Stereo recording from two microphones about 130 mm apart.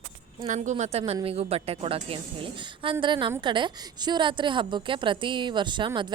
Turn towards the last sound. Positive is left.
turn(degrees=-35)  # may be behind; listen again after turning